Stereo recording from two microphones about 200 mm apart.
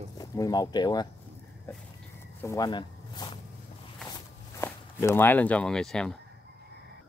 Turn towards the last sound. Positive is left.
turn(degrees=5)  # may be behind; listen again after turning